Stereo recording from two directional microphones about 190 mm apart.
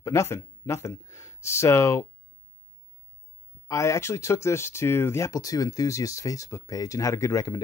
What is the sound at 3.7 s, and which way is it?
Speech, 15° left (ahead or behind).